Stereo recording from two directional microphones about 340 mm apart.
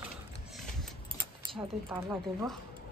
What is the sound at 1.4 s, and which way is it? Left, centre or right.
A woman's voice, centre.